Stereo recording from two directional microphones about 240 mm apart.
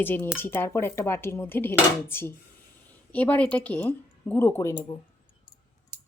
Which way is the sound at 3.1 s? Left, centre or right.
Centre.